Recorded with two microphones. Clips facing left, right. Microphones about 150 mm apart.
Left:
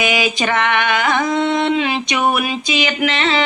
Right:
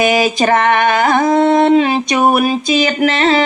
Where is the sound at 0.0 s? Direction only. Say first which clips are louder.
Right 6 dB; 45° right (ahead or behind).